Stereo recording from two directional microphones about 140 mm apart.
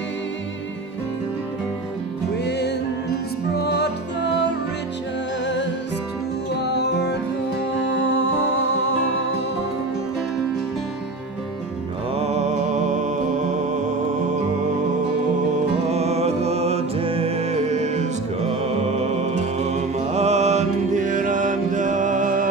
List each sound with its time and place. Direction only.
12.2 s music: 50° right (ahead or behind)
15.9 s music: 50° right (ahead or behind); by 22.5 s 75° right (ahead or behind)